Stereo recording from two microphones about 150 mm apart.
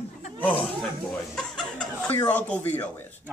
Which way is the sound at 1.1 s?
5° left (ahead or behind).